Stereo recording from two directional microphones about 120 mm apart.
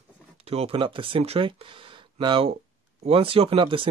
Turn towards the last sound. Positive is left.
turn(degrees=-50)  # may be behind; listen again after turning